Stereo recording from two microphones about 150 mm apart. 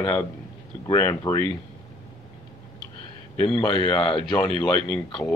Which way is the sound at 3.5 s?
40° left (ahead or behind).